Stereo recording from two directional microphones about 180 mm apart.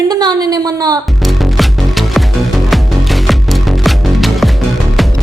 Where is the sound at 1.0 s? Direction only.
Centre (ahead or behind).